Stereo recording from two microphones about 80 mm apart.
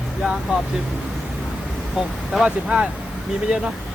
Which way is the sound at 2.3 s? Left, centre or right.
Centre.